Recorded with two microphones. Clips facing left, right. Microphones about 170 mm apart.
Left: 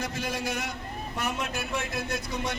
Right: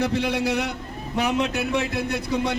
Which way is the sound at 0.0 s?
65° right (ahead or behind).